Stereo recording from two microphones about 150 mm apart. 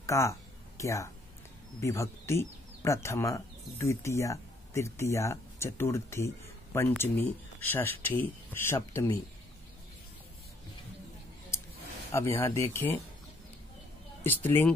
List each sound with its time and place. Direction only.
0.0 s a sound: 20° left (ahead or behind)
1.8 s speech: 20° left (ahead or behind)
12.1 s speech: 15° left (ahead or behind)
14.2 s speech: 15° left (ahead or behind)